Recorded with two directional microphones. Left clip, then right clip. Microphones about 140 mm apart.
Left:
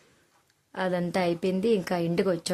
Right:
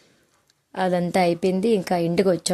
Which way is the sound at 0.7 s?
30° right (ahead or behind).